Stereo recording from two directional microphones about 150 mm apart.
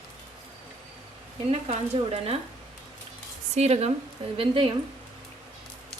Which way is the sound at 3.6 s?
45° right (ahead or behind).